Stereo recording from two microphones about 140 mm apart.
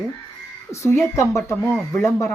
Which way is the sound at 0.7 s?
20° left (ahead or behind).